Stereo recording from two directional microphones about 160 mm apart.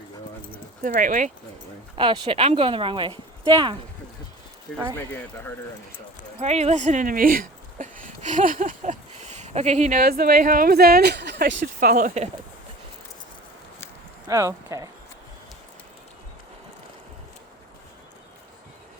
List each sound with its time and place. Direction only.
0.8 s speech: 60° right (ahead or behind)
2.0 s speech: 35° right (ahead or behind)
4.9 s speech: 15° left (ahead or behind)
6.4 s speech: 40° right (ahead or behind)
10.0 s speech: 70° right (ahead or behind); by 11.5 s 90° right
11.6 s speech: 60° right (ahead or behind)
14.3 s speech: 20° right (ahead or behind)